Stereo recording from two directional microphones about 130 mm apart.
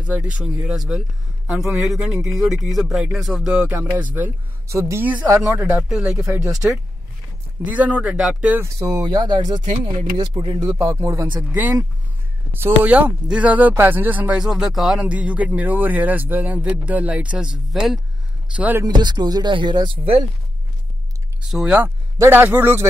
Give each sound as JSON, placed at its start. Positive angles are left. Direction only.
{"t": 0.0, "sound": "speech", "side_deg": -10}
{"t": 5.8, "sound": "speech", "side_deg": -5}
{"t": 6.2, "sound": "speech", "side_deg": -20}
{"t": 6.5, "sound": "speech", "side_deg": 0}
{"t": 8.7, "sound": "speech", "side_deg": -30}
{"t": 10.7, "sound": "speech", "side_deg": -25}
{"t": 11.5, "sound": "speech", "side_deg": -15}
{"t": 18.6, "sound": "speech", "side_deg": -15}
{"t": 18.9, "sound": "speech", "side_deg": -35}
{"t": 21.5, "sound": "speech", "side_deg": -5}
{"t": 21.8, "sound": "speech", "side_deg": -15}